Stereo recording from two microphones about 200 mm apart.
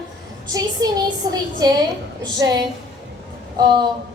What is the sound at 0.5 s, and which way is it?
A child's voice, 20° right (ahead or behind).